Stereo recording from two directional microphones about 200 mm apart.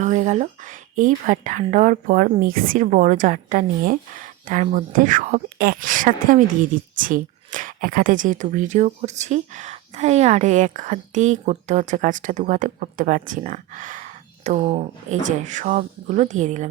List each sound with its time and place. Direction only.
0.0 s speech: 35° right (ahead or behind)